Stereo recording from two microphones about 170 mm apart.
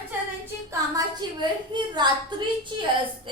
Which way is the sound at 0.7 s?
25° right (ahead or behind).